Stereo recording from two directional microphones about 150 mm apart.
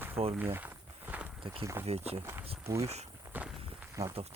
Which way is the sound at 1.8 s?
40° right (ahead or behind).